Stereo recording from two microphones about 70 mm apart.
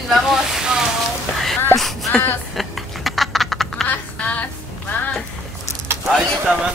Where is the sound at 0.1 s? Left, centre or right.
Centre.